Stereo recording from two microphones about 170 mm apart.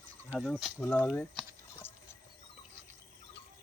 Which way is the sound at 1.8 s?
15° left (ahead or behind).